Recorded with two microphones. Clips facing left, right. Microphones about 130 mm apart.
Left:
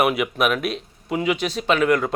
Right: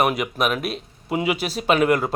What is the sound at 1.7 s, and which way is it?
Speech, 45° right (ahead or behind).